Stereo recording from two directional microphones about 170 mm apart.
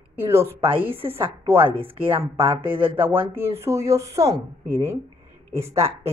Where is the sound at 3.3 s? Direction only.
15° right (ahead or behind).